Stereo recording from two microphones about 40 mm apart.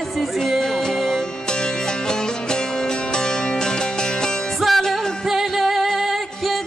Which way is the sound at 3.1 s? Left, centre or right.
Centre.